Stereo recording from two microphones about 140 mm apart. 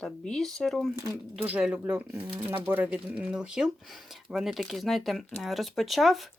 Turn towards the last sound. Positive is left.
turn(degrees=0)  # may be behind; listen again after turning